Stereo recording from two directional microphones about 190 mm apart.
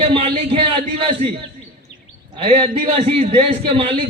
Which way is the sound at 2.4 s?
30° right (ahead or behind).